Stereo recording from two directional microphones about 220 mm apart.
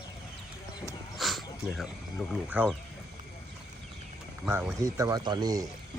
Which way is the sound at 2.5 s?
5° right (ahead or behind).